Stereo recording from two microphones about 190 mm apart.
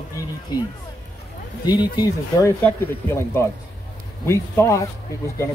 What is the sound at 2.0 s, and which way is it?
A man's voice, 20° left (ahead or behind).